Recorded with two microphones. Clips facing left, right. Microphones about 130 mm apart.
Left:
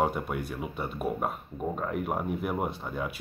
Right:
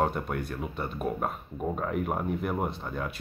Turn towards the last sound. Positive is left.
turn(degrees=5)  # may be behind; listen again after turning